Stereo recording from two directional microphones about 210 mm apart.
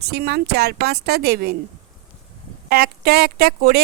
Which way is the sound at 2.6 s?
45° right (ahead or behind).